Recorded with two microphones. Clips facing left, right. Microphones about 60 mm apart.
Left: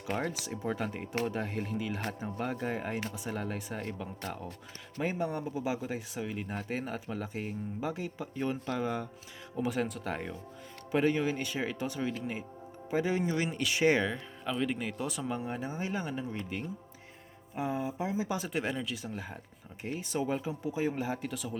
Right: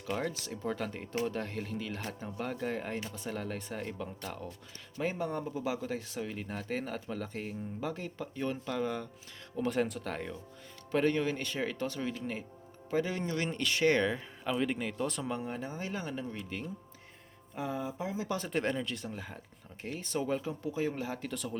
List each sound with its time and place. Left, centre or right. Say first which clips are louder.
0.4 s speech: left 1 dB; centre
14.0 s speech: right 1 dB; centre
17.5 s speech: left 3 dB; centre